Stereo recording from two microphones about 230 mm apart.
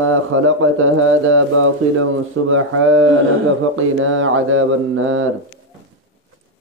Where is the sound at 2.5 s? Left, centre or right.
Right.